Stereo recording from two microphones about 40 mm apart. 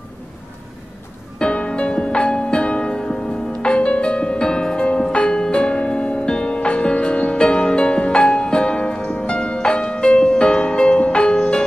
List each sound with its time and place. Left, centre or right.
1.4 s music: left